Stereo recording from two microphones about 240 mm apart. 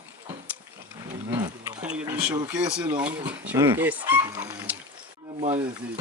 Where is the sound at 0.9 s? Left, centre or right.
Centre.